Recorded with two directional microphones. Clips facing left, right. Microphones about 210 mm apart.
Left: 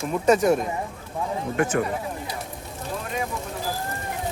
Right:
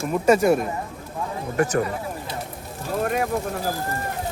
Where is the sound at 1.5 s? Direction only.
40° right (ahead or behind).